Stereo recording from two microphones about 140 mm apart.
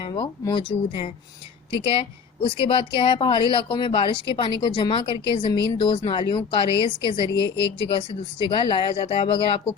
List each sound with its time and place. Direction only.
0.0 s speech: 30° left (ahead or behind)